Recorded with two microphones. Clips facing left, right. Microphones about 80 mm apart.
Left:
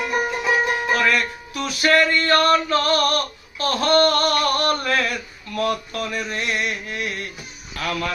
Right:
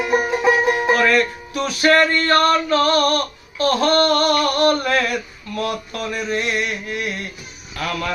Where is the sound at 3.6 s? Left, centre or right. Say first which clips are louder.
Right 1 dB; right.